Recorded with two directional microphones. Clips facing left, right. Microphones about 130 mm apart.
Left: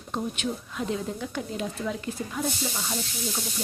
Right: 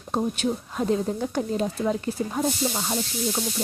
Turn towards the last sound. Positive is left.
turn(degrees=-35)  # may be behind; listen again after turning